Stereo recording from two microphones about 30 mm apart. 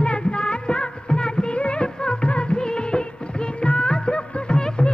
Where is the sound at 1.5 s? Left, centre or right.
Left.